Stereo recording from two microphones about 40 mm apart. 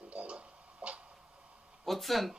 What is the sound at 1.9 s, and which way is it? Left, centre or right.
Speech, centre.